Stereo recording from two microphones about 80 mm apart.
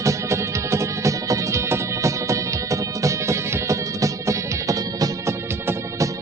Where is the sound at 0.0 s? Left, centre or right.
Right.